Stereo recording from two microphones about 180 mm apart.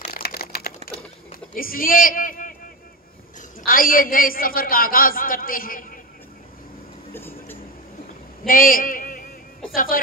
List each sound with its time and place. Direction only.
0.0 s typing: 55° left (ahead or behind)
1.5 s a man's voice: 55° left (ahead or behind)
3.6 s a man's voice: 50° left (ahead or behind)
7.2 s speech: 10° left (ahead or behind)
8.5 s a man's voice: 50° left (ahead or behind)